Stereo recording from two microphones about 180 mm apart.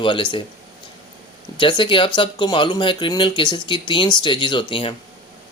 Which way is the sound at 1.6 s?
25° left (ahead or behind).